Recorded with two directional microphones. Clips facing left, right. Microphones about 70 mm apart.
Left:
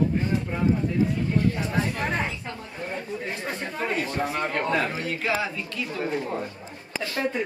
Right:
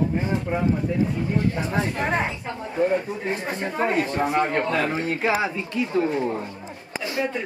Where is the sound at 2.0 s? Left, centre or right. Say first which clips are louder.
Right 3 dB; centre.